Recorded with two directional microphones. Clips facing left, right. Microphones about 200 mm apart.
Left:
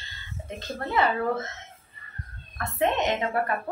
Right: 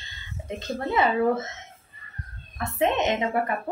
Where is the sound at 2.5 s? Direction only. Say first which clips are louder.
Right 1 dB; 20° right (ahead or behind).